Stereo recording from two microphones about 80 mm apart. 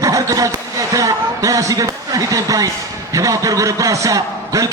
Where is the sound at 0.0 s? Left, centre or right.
Right.